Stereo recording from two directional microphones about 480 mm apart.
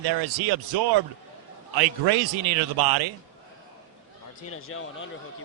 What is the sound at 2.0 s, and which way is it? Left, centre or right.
A man's voice, right.